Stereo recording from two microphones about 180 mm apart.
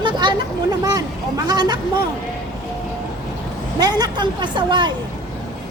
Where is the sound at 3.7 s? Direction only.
20° right (ahead or behind).